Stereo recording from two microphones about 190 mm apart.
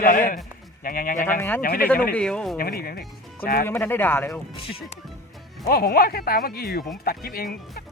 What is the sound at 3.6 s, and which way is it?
Speech, 10° left (ahead or behind).